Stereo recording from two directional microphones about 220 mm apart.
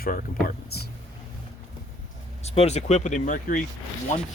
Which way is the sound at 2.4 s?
30° left (ahead or behind).